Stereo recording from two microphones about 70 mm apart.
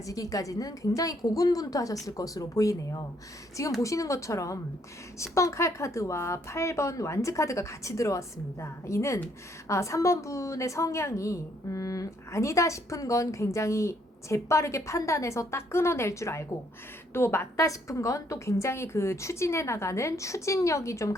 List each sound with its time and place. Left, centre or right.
0.0 s a woman's voice: left
17.6 s a woman's voice: left